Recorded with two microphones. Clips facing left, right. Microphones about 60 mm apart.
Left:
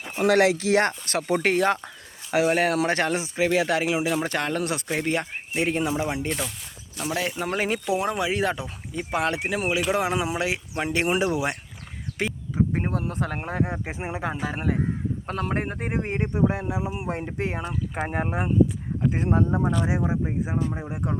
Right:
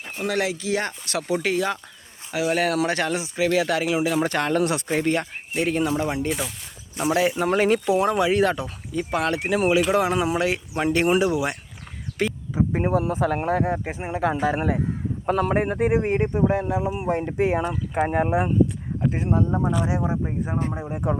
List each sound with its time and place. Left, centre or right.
0.2 s speech: left
1.0 s speech: left
2.5 s speech: left
4.0 s speech: centre
6.2 s speech: centre
9.5 s speech: centre
12.2 s a sound: centre
12.5 s speech: centre
13.9 s speech: centre
14.3 s speech: centre
16.3 s speech: centre
19.5 s speech: centre
20.8 s speech: centre